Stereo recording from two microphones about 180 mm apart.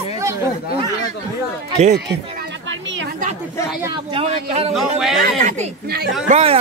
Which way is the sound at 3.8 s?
25° right (ahead or behind).